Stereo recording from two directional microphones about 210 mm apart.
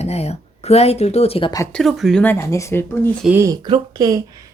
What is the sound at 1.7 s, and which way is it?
Speech, centre (ahead or behind).